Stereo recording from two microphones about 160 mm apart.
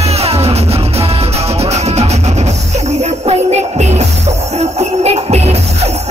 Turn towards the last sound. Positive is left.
turn(degrees=-40)  # may be behind; listen again after turning